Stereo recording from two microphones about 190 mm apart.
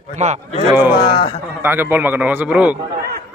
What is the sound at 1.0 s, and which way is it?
Speech, 25° left (ahead or behind).